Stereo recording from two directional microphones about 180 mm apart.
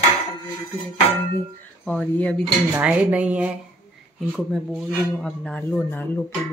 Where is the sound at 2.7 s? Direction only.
10° right (ahead or behind).